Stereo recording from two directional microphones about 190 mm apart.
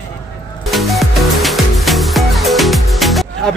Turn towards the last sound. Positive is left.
turn(degrees=0)  # may be behind; listen again after turning